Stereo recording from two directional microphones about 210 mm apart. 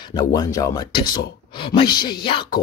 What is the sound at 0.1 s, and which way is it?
Speech, 20° left (ahead or behind).